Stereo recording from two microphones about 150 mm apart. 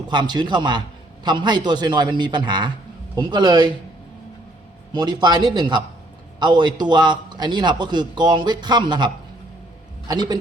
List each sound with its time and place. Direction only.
0.1 s a man's voice: 30° right (ahead or behind)
4.9 s a man's voice: 30° right (ahead or behind)